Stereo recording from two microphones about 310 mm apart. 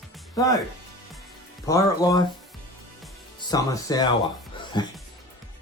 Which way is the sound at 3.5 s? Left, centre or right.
Centre.